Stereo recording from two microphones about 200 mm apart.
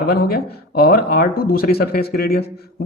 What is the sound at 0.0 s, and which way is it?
Speech, 50° left (ahead or behind).